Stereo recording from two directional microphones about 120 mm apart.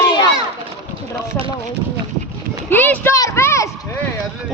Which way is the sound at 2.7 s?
15° left (ahead or behind).